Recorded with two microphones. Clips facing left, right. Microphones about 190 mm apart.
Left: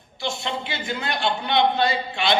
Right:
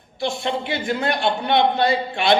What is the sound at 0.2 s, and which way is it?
A man's voice, 55° right (ahead or behind).